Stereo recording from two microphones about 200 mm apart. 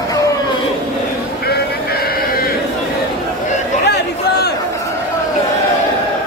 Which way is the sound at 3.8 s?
55° left (ahead or behind).